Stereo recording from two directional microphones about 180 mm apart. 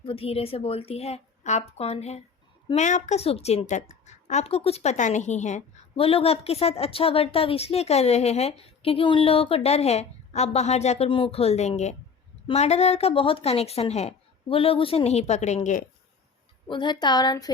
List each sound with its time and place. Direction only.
0.0 s a woman's voice: 30° left (ahead or behind)
16.6 s a woman's voice: 25° left (ahead or behind)